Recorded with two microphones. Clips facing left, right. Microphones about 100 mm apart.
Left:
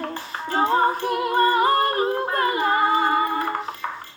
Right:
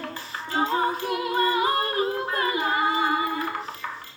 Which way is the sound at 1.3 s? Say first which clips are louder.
Left 5 dB; 45° left (ahead or behind).